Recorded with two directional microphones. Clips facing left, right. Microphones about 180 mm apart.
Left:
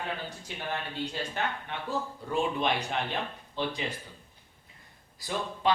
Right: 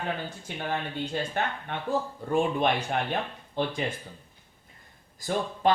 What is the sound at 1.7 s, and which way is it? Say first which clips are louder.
Speech: right 4 dB; 50° right (ahead or behind).